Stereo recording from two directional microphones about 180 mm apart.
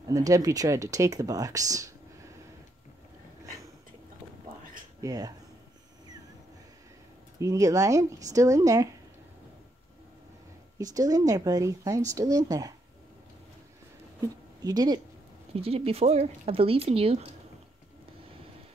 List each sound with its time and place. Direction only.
0.0 s speech: 20° right (ahead or behind)
5.0 s speech: 20° right (ahead or behind)
7.3 s speech: 20° right (ahead or behind)
10.8 s speech: 20° right (ahead or behind)
14.2 s a woman's voice: 20° right (ahead or behind)
15.5 s speech: 35° right (ahead or behind)